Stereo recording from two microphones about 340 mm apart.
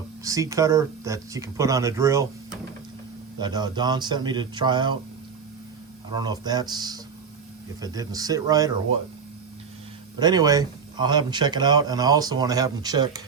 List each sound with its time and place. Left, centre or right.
0.3 s speech: centre
3.3 s speech: centre
6.1 s speech: centre
10.2 s speech: centre